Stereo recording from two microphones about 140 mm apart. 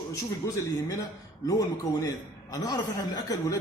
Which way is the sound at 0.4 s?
25° left (ahead or behind).